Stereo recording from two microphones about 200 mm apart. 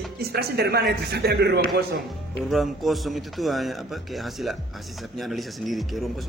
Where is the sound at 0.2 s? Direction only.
50° right (ahead or behind).